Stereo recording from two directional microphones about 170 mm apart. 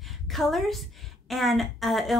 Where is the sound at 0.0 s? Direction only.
Centre (ahead or behind).